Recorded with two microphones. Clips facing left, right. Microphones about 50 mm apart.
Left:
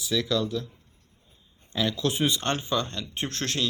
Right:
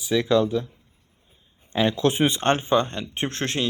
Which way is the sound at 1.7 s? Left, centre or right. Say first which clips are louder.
Right 6 dB; right.